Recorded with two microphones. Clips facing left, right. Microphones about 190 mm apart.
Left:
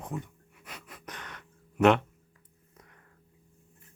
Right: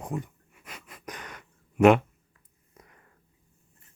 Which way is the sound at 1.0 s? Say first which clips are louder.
Right 6 dB; 10° right (ahead or behind).